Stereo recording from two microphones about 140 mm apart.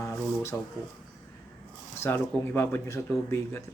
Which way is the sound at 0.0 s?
20° left (ahead or behind).